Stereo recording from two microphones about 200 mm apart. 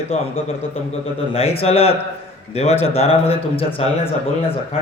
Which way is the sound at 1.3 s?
30° left (ahead or behind).